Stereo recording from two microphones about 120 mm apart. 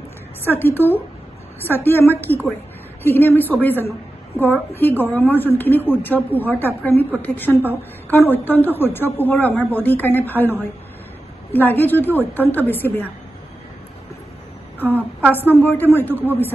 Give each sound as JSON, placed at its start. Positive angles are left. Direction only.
{"t": 0.6, "sound": "a woman's voice", "side_deg": 15}
{"t": 14.9, "sound": "a woman's voice", "side_deg": -15}
{"t": 15.5, "sound": "a woman's voice", "side_deg": 15}